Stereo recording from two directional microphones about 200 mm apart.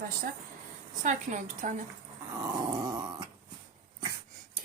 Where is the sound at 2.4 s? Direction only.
20° right (ahead or behind).